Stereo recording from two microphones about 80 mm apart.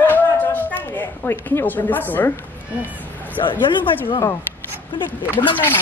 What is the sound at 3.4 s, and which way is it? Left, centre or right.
Speech, left.